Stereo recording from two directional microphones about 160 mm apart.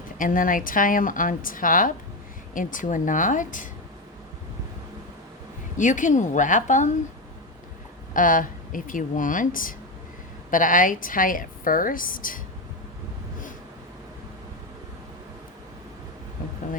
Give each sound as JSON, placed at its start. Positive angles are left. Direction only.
{"t": 0.2, "sound": "a woman's voice", "side_deg": 60}
{"t": 5.7, "sound": "a woman's voice", "side_deg": 50}
{"t": 8.1, "sound": "a woman's voice", "side_deg": 55}